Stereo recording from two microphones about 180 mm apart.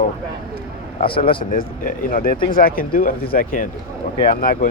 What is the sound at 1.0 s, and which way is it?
Speech, 30° left (ahead or behind).